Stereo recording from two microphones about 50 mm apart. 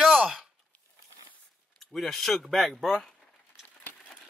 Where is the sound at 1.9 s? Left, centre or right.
Centre.